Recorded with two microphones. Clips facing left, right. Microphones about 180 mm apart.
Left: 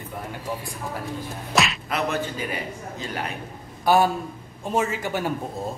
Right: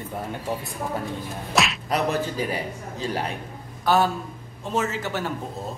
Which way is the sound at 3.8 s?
10° left (ahead or behind).